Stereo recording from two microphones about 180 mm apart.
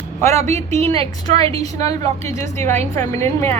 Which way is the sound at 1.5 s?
20° left (ahead or behind).